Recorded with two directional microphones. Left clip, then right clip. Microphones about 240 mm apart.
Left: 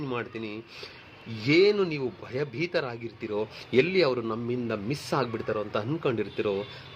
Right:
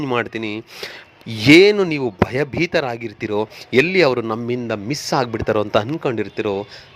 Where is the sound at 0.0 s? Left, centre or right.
Right.